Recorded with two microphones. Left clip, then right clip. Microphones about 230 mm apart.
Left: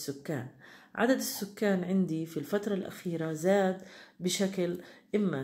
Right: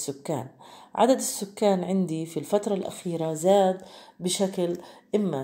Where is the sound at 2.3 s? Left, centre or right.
Right.